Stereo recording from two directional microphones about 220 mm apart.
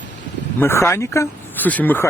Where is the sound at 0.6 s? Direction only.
10° left (ahead or behind).